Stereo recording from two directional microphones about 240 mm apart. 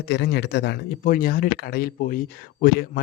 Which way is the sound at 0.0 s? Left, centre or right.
Left.